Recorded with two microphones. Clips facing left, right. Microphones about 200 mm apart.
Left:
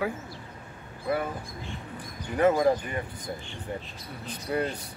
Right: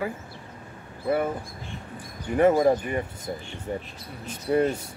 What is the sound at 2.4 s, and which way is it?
Speech, 30° right (ahead or behind).